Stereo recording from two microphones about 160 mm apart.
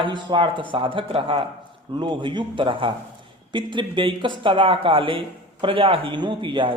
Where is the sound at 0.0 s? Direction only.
30° right (ahead or behind).